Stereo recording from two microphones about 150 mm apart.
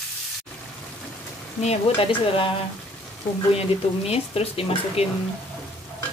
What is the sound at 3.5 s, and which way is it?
Speech, 40° left (ahead or behind).